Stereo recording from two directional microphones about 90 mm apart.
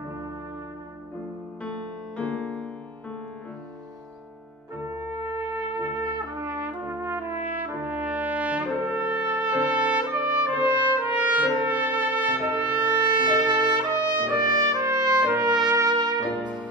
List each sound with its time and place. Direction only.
2.1 s music: 15° left (ahead or behind)
5.3 s trumpet: 45° right (ahead or behind)
6.4 s brass instrument: 15° right (ahead or behind)
11.1 s trumpet: 20° right (ahead or behind)
13.0 s music: 55° right (ahead or behind)
13.9 s trumpet: 50° right (ahead or behind)
15.9 s music: 55° right (ahead or behind)
16.3 s music: 15° left (ahead or behind)